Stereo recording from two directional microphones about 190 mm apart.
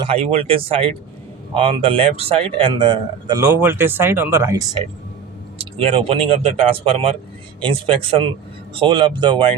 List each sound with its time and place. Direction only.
0.0 s speech: 30° right (ahead or behind); by 4.8 s 15° right (ahead or behind)
5.5 s speech: 30° right (ahead or behind)